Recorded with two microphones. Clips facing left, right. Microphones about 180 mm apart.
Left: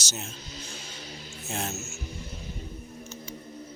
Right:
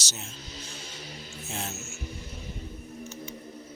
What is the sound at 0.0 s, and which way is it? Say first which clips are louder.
Speech: left 4 dB; 45° left (ahead or behind).